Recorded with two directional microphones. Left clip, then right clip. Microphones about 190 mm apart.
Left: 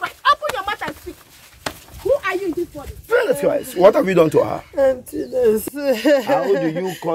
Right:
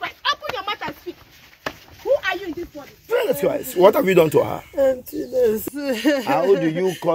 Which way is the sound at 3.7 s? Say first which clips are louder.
Left 1 dB; 35° right (ahead or behind).